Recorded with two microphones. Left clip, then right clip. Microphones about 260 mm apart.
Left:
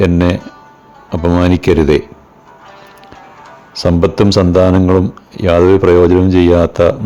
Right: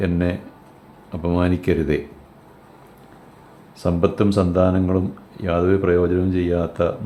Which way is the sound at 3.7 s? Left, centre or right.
Left.